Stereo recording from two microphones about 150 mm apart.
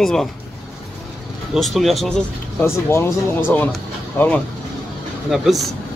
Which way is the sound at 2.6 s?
15° left (ahead or behind).